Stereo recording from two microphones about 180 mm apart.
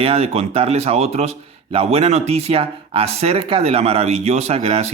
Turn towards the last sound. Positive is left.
turn(degrees=-35)  # may be behind; listen again after turning